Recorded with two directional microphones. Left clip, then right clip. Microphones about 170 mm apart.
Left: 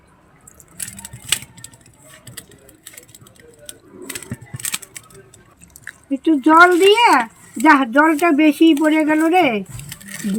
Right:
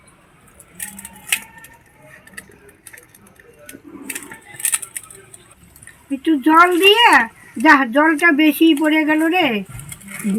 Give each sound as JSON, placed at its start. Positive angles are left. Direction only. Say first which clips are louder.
{"t": 6.1, "sound": "speech", "louder": "left 2 dB", "side_deg": 5}